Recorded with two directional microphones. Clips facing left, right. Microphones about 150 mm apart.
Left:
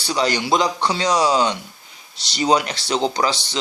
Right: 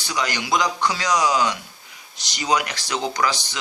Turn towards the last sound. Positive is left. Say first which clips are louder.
# left 2 dB
turn(degrees=30)  # may be behind; listen again after turning